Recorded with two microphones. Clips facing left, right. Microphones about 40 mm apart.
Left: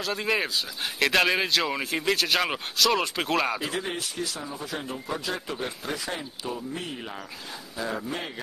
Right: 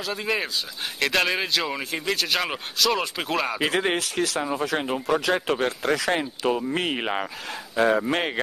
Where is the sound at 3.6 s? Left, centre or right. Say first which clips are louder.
Right 7 dB; right.